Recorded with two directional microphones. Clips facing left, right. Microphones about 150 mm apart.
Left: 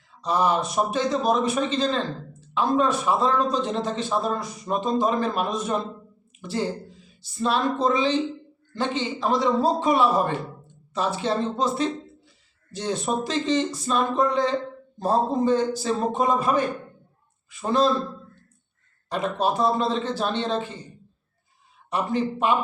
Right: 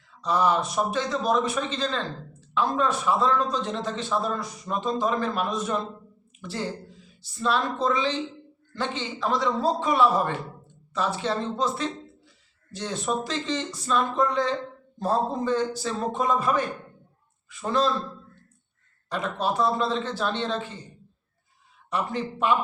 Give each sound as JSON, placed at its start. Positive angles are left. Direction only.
{"t": 0.2, "sound": "a man's voice", "side_deg": 20}
{"t": 19.0, "sound": "a man's voice", "side_deg": 20}
{"t": 21.8, "sound": "a man's voice", "side_deg": 20}